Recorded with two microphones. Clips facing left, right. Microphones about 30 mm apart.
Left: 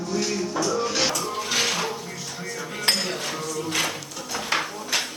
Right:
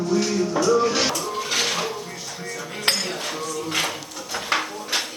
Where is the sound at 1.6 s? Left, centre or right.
Right.